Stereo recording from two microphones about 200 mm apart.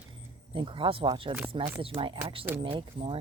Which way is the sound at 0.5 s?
25° right (ahead or behind).